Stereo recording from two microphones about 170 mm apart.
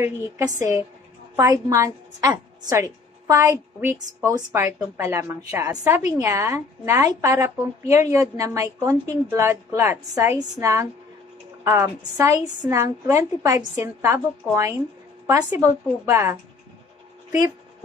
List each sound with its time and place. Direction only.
0.6 s a woman's voice: 15° right (ahead or behind)